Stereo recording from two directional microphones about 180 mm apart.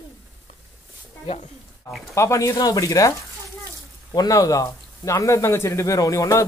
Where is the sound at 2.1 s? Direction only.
15° left (ahead or behind).